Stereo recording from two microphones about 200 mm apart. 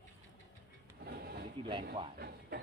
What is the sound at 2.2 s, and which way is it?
Speech, 50° right (ahead or behind).